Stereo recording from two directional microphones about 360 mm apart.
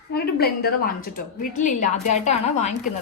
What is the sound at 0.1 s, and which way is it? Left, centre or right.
A woman's voice, left.